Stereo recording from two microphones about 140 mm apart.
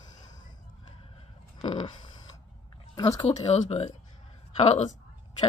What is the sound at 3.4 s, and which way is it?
Speech, 50° left (ahead or behind).